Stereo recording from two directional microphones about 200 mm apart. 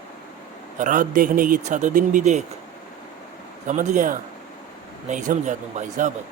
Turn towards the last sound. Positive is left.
turn(degrees=-40)  # may be behind; listen again after turning